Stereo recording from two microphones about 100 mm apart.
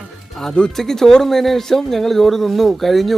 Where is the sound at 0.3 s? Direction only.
5° left (ahead or behind).